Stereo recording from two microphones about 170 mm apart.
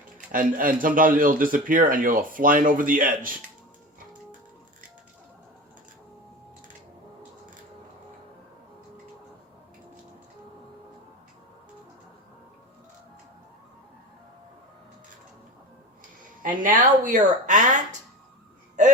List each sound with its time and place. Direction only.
0.3 s a man's voice: 55° right (ahead or behind)
16.4 s a man's voice: 50° right (ahead or behind)